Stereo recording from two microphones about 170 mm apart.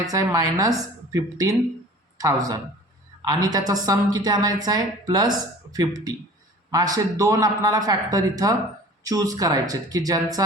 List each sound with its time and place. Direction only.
0.1 s a man's voice: 20° right (ahead or behind)